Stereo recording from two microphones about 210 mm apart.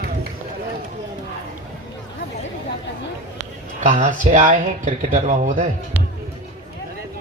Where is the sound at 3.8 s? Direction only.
35° right (ahead or behind).